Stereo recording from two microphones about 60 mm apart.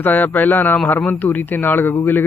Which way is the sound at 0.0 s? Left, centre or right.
Left.